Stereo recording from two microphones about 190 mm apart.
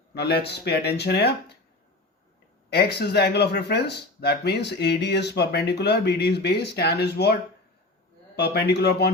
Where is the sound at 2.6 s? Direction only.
55° left (ahead or behind).